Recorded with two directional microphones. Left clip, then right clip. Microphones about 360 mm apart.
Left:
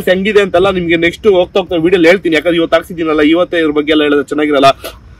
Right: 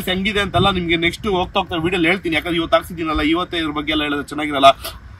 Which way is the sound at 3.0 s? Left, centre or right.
Centre.